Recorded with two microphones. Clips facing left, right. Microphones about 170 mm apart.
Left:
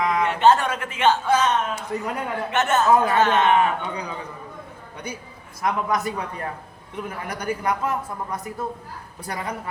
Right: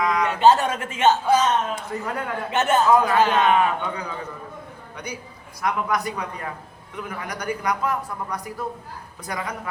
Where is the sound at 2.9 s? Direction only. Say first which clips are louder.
Left 2 dB; 25° left (ahead or behind).